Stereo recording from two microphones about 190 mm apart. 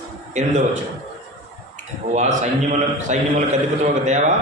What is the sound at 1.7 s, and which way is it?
A man's voice, 40° right (ahead or behind).